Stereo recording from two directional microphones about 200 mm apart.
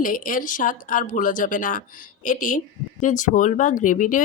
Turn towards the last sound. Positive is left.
turn(degrees=40)  # may be behind; listen again after turning